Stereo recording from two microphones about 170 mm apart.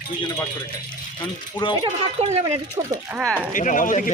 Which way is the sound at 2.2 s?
35° right (ahead or behind).